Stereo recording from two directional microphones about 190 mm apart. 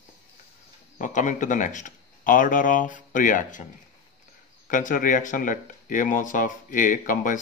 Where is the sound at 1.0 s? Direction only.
40° left (ahead or behind).